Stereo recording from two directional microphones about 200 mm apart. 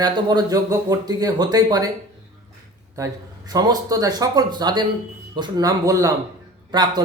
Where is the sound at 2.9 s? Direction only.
15° right (ahead or behind).